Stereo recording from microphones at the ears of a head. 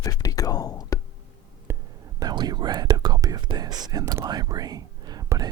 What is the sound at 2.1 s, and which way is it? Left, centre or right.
Speech, right.